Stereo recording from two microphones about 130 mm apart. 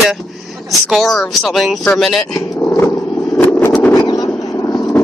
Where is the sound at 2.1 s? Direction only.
25° left (ahead or behind).